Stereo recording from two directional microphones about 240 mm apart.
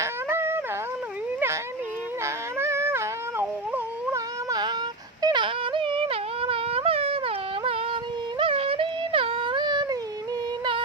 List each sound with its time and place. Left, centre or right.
0.0 s dog: centre
2.2 s a sound: centre
5.2 s yodeling: centre
8.4 s music: right